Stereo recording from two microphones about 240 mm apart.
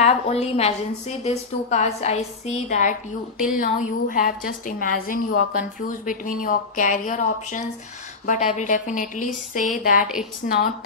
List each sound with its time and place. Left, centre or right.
0.0 s a woman's voice: left